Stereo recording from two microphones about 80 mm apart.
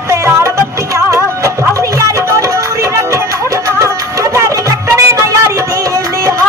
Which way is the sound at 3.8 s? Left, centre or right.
Right.